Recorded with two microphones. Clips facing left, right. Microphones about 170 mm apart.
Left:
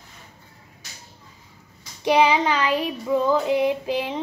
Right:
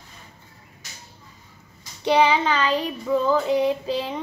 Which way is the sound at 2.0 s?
10° left (ahead or behind).